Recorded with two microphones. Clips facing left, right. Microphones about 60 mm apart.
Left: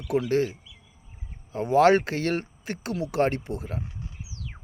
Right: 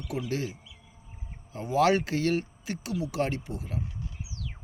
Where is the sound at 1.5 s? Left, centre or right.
Left.